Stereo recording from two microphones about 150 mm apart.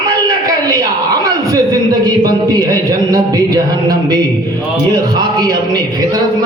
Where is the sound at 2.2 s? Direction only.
25° right (ahead or behind).